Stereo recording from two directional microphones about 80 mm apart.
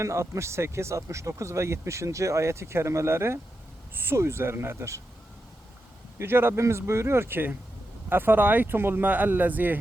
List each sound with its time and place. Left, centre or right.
0.0 s speech: right
6.1 s speech: right